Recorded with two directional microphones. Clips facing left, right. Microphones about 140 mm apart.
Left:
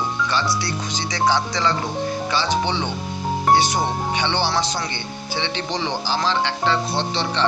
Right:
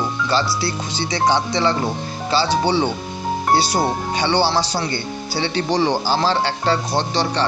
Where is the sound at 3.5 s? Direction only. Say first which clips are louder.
Left 1 dB; 35° right (ahead or behind).